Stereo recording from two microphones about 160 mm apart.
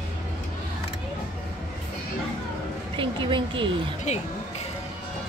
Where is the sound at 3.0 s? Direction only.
30° right (ahead or behind).